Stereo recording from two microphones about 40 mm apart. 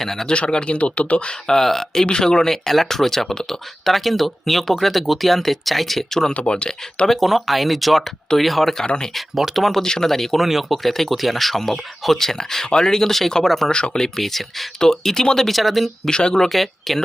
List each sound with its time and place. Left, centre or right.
0.0 s speech: centre
0.3 s speech: left
1.3 s speech: centre
6.3 s speech: left
7.1 s speech: centre
9.8 s speech: centre
10.4 s speech: centre
13.7 s speech: left
14.0 s speech: centre
15.4 s speech: centre
16.0 s speech: centre
16.5 s speech: centre